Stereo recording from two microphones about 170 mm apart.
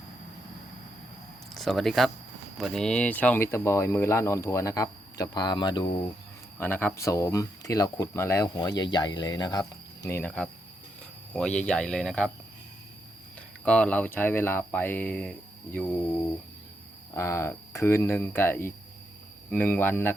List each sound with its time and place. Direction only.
1.5 s speech: centre (ahead or behind); by 6.0 s 25° left (ahead or behind)
6.6 s speech: 10° left (ahead or behind)
13.7 s speech: 5° left (ahead or behind)
17.2 s speech: 15° left (ahead or behind)